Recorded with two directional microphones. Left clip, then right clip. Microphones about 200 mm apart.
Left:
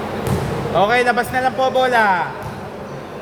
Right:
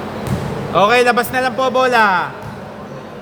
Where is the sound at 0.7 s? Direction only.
45° right (ahead or behind); by 2.2 s 30° right (ahead or behind).